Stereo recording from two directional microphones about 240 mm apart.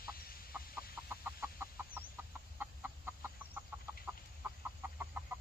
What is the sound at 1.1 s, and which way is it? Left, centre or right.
Chicken, centre.